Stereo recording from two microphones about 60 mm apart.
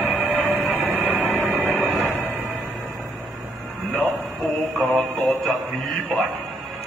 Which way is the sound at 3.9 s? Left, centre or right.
Centre.